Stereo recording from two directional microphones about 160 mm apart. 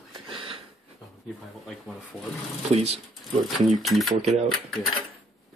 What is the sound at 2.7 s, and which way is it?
Speech, 40° right (ahead or behind).